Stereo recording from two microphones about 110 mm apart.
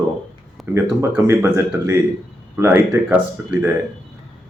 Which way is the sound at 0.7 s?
20° right (ahead or behind).